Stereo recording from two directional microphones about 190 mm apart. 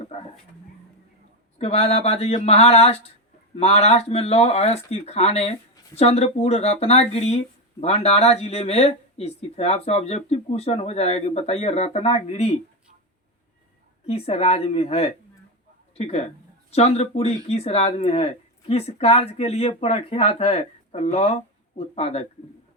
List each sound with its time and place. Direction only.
1.5 s speech: 35° left (ahead or behind)
14.1 s speech: 30° left (ahead or behind)